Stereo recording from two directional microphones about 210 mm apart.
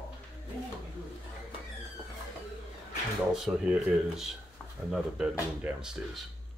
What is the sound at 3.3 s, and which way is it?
Speech, 5° right (ahead or behind).